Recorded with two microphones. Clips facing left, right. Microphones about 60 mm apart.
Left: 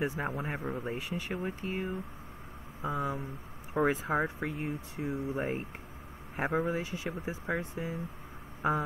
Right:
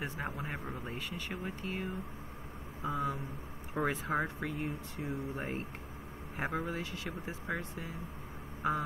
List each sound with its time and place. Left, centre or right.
0.0 s speech: centre
4.2 s speech: centre
8.6 s a sound: centre